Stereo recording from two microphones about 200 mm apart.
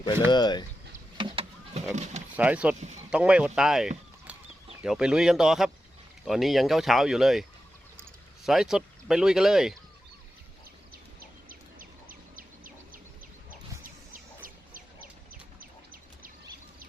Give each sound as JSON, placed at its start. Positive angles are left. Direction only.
{"t": 0.3, "sound": "speech", "side_deg": 20}
{"t": 1.2, "sound": "a sound", "side_deg": -30}
{"t": 2.3, "sound": "speech", "side_deg": -5}
{"t": 8.4, "sound": "speech", "side_deg": 0}
{"t": 11.2, "sound": "bird", "side_deg": -45}
{"t": 14.1, "sound": "chicken", "side_deg": -45}